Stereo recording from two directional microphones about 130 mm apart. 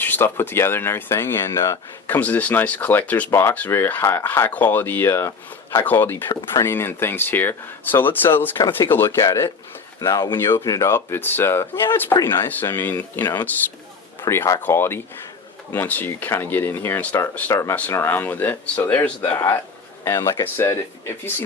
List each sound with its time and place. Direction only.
0.0 s speech: 15° left (ahead or behind)
8.5 s speech: 30° left (ahead or behind)
8.9 s speech: 20° left (ahead or behind)
12.5 s speech: 15° left (ahead or behind)
20.1 s speech: 25° left (ahead or behind)